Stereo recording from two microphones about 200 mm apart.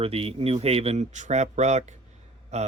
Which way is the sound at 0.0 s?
30° right (ahead or behind).